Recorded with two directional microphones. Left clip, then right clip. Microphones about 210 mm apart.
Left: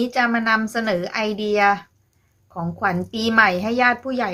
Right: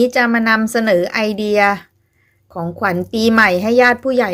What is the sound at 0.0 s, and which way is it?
A woman's voice, 30° right (ahead or behind).